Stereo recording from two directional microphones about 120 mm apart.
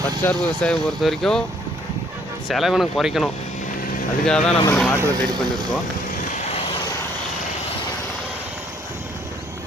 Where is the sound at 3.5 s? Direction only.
90° left.